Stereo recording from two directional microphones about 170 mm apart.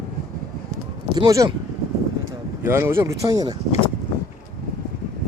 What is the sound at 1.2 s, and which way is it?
Speech, 20° right (ahead or behind).